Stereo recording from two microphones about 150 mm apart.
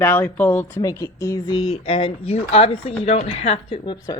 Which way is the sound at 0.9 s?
25° left (ahead or behind).